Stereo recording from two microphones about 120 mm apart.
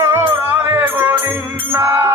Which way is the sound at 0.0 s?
20° right (ahead or behind).